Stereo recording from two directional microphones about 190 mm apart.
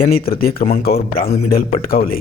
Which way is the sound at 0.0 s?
50° left (ahead or behind).